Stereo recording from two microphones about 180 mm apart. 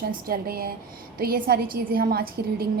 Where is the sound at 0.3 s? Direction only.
55° right (ahead or behind).